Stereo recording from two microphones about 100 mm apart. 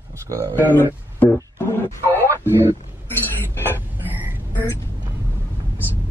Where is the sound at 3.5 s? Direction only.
20° left (ahead or behind).